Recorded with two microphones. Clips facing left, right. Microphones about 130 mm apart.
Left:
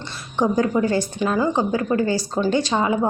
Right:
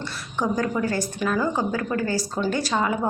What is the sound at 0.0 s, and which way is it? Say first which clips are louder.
A woman's voice: left 5 dB; 25° left (ahead or behind).